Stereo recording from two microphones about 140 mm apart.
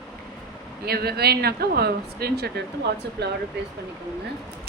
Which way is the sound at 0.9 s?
90° right.